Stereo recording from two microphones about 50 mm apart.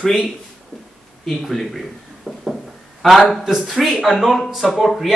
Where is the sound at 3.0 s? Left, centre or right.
Centre.